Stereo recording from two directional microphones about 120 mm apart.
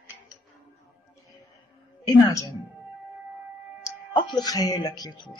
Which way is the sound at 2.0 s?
25° left (ahead or behind).